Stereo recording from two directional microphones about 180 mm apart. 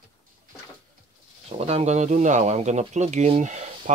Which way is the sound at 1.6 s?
35° right (ahead or behind).